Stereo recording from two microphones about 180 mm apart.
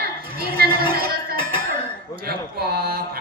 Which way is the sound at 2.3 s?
60° right (ahead or behind).